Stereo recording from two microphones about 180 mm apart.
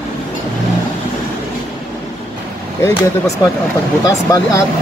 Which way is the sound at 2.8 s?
15° left (ahead or behind).